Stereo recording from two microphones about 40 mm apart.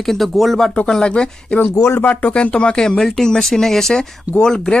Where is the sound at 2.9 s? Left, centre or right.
Centre.